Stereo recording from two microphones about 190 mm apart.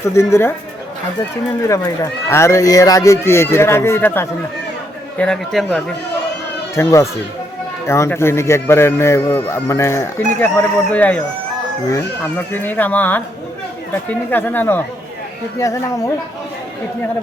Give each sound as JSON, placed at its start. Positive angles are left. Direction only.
{"t": 0.0, "sound": "speech", "side_deg": 15}
{"t": 1.6, "sound": "a man's voice", "side_deg": 20}
{"t": 6.7, "sound": "speech", "side_deg": 15}